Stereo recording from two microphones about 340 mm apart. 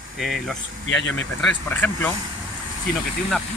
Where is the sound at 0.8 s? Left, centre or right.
Left.